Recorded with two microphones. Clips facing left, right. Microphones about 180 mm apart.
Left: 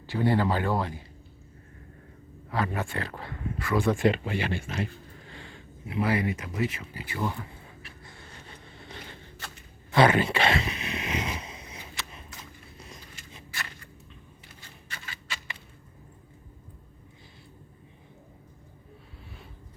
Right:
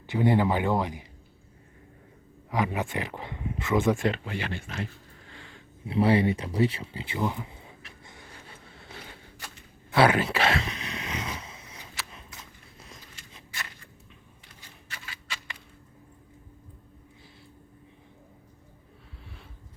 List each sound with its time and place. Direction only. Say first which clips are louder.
0.1 s speech: right 2 dB; 15° right (ahead or behind)
2.5 s speech: right 2 dB; 15° right (ahead or behind)
3.9 s speech: left 4 dB; 5° left (ahead or behind)
5.8 s speech: right 5 dB; 30° right (ahead or behind)
8.0 s a sound: right 2 dB; 15° right (ahead or behind); by 11.9 s 15° left (ahead or behind)
12.7 s a sound: even; centre (ahead or behind)
14.8 s scissors: left 1 dB; 5° right (ahead or behind)